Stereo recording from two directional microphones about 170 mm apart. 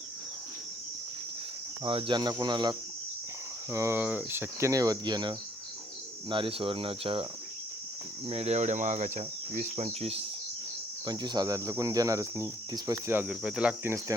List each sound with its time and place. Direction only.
1.8 s speech: 30° right (ahead or behind)
3.7 s cricket: 15° right (ahead or behind)
6.3 s speech: 30° right (ahead or behind)
8.3 s speech: 40° right (ahead or behind)
11.0 s speech: 25° right (ahead or behind)